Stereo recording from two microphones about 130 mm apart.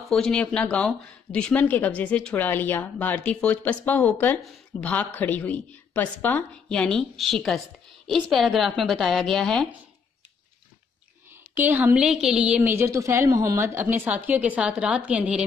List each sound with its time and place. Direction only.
0.1 s a woman's voice: 5° left (ahead or behind)
11.5 s a woman's voice: 15° right (ahead or behind)